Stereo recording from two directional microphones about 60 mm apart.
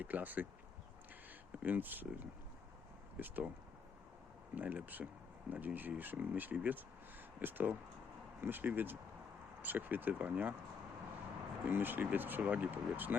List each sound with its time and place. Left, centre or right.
0.0 s speech: right
1.5 s speech: right
4.5 s speech: right
11.7 s speech: right